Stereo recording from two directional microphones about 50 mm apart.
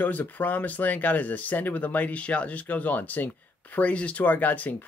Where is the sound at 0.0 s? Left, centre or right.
Left.